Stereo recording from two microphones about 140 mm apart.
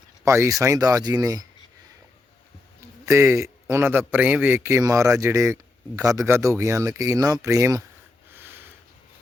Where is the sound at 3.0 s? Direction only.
20° right (ahead or behind).